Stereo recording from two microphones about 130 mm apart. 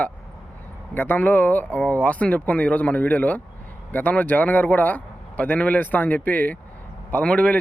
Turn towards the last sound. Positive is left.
turn(degrees=10)  # may be behind; listen again after turning